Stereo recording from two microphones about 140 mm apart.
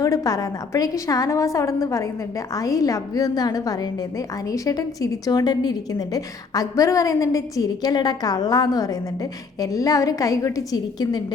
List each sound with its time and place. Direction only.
0.0 s a woman's voice: 25° left (ahead or behind)